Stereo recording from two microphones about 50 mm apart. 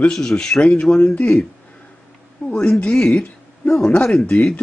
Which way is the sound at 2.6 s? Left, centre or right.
Left.